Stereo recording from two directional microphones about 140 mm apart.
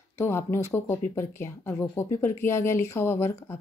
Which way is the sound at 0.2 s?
15° left (ahead or behind).